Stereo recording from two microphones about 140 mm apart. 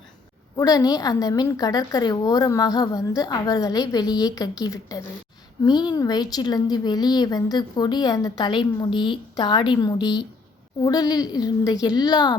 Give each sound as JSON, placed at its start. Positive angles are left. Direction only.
{"t": 0.5, "sound": "a woman's voice", "side_deg": 25}